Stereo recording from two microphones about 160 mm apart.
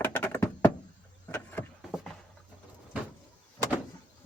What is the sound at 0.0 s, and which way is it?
Thunk, 15° left (ahead or behind).